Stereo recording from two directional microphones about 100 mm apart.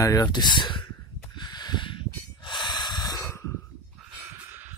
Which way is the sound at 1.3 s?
45° left (ahead or behind).